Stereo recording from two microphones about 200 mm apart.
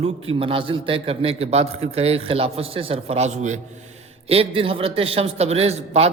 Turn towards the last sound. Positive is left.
turn(degrees=-30)  # may be behind; listen again after turning